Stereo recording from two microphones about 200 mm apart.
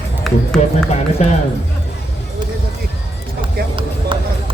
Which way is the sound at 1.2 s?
35° left (ahead or behind).